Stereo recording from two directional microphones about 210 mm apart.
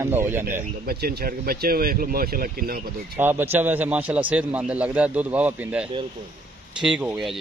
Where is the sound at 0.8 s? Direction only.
45° right (ahead or behind).